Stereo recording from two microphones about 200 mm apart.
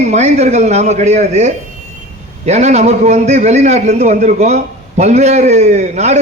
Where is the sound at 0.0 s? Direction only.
35° right (ahead or behind).